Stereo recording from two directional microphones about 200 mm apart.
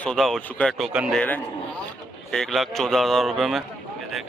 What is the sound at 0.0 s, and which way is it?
A man's voice, centre (ahead or behind).